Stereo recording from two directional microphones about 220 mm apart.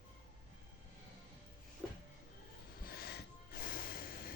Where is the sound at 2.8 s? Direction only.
45° left (ahead or behind).